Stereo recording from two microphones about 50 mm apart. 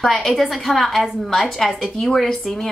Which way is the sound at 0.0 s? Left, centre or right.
Centre.